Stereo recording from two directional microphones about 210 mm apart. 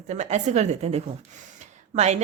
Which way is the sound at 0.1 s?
35° right (ahead or behind).